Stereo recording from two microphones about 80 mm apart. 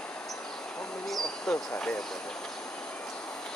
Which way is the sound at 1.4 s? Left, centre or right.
Centre.